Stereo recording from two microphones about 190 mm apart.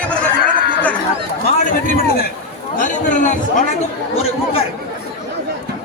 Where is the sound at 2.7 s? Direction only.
40° left (ahead or behind).